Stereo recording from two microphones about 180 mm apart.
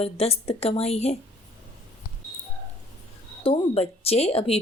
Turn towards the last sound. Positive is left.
turn(degrees=35)  # may be behind; listen again after turning